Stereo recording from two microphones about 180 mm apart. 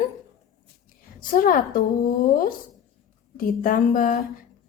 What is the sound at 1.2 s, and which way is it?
Speech, 50° left (ahead or behind).